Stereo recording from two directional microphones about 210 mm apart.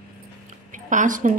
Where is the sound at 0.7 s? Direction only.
35° right (ahead or behind).